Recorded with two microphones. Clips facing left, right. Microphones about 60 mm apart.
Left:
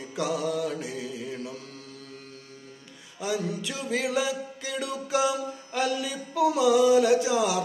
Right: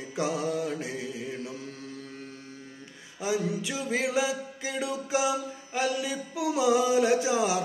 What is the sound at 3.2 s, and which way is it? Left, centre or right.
Music, right.